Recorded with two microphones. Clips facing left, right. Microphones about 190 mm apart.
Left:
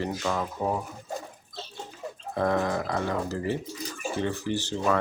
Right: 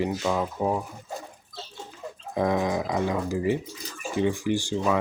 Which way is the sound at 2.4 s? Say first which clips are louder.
Right 1 dB; 15° right (ahead or behind).